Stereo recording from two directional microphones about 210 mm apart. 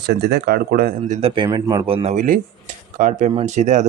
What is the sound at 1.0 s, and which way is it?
Speech, 30° right (ahead or behind).